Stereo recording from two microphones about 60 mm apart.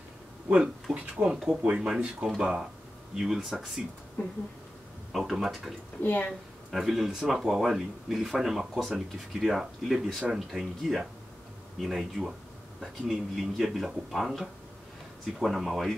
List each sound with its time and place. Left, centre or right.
0.9 s speech: right; by 3.6 s centre
4.2 s speech: left
5.1 s speech: centre
6.0 s speech: left
6.7 s speech: centre